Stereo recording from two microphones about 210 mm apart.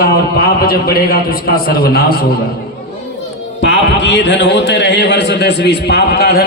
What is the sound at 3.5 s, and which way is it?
A man's voice, 60° left (ahead or behind).